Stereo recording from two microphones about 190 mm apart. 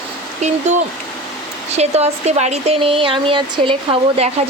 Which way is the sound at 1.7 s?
35° right (ahead or behind).